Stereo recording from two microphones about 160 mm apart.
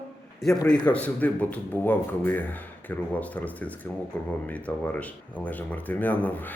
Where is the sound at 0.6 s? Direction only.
10° left (ahead or behind).